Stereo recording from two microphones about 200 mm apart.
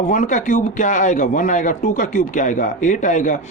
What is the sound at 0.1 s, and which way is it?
Speech, 40° left (ahead or behind).